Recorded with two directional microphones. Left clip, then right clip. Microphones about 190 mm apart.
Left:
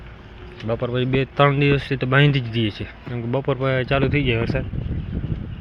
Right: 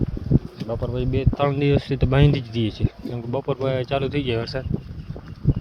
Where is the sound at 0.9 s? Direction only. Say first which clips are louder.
Left 6 dB; centre (ahead or behind); by 4.6 s 25° right (ahead or behind).